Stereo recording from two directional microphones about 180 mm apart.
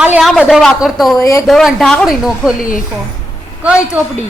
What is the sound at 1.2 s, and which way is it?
Speech, 15° left (ahead or behind).